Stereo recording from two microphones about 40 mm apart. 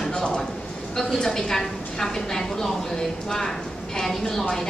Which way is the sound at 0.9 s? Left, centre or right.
Centre.